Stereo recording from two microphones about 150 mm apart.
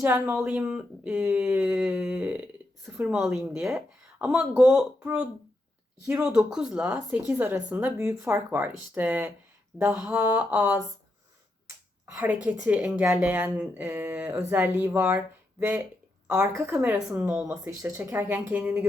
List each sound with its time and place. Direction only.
0.0 s a woman's voice: 15° right (ahead or behind)
12.5 s a woman's voice: 10° right (ahead or behind)
16.5 s a woman's voice: 20° right (ahead or behind)
16.7 s speech: 10° right (ahead or behind)
17.7 s speech: 15° right (ahead or behind)